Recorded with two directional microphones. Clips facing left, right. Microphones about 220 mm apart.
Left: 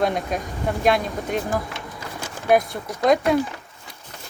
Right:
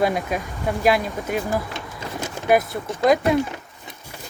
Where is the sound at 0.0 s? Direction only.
5° right (ahead or behind).